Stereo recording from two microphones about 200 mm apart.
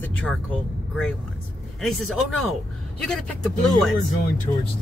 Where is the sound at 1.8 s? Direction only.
Centre (ahead or behind).